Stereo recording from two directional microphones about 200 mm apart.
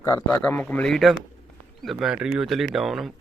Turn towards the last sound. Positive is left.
turn(degrees=0)  # may be behind; listen again after turning